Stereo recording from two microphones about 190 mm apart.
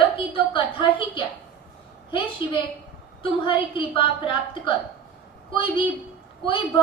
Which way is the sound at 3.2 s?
25° left (ahead or behind).